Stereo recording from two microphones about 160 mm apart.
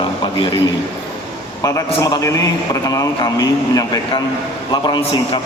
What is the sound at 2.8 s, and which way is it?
A man's voice, 20° left (ahead or behind).